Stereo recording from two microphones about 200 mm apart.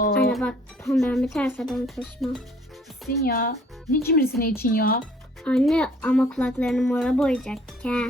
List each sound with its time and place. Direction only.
0.3 s speech: 5° left (ahead or behind)
3.1 s speech: 50° left (ahead or behind)
5.4 s speech: centre (ahead or behind)